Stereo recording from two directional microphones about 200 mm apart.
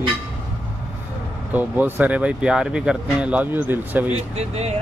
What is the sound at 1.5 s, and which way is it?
Speech, 10° right (ahead or behind).